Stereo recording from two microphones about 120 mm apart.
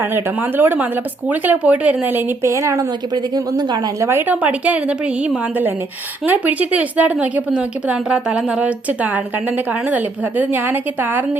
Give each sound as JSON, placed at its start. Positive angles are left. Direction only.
{"t": 0.0, "sound": "a woman's voice", "side_deg": -20}
{"t": 4.1, "sound": "a woman's voice", "side_deg": -15}